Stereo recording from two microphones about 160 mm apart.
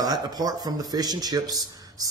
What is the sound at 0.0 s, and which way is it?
Speech, 25° right (ahead or behind).